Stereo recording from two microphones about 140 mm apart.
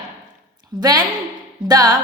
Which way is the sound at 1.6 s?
30° right (ahead or behind).